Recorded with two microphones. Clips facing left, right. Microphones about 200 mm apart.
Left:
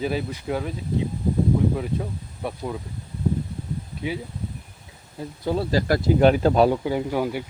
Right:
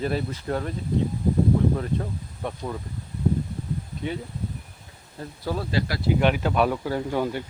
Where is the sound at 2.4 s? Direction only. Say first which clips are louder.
Left 2 dB; 5° left (ahead or behind).